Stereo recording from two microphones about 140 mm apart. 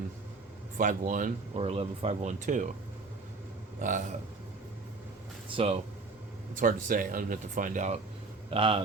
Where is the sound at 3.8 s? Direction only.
65° right (ahead or behind).